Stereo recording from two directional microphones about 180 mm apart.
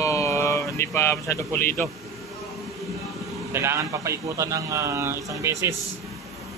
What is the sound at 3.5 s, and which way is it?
A man's voice, 15° right (ahead or behind).